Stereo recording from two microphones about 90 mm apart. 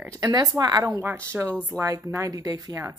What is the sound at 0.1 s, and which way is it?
Speech, 45° right (ahead or behind).